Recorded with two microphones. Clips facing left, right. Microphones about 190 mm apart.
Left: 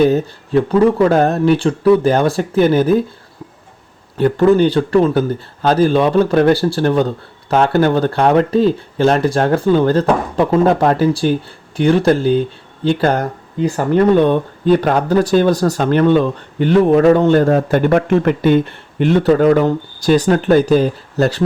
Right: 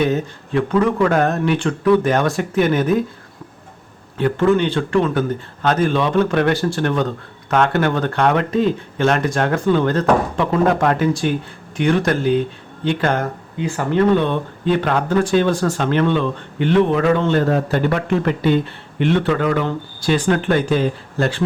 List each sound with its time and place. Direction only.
0.0 s speech: 35° left (ahead or behind)
4.2 s speech: 40° left (ahead or behind)